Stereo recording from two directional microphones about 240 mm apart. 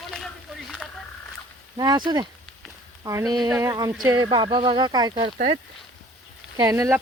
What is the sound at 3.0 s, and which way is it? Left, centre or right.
Speech, centre.